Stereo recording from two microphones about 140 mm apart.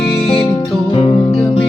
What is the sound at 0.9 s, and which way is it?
Music, 35° left (ahead or behind).